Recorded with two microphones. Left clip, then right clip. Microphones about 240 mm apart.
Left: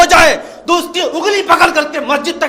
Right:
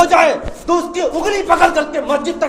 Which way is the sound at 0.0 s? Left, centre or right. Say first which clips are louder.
Left 4 dB; left.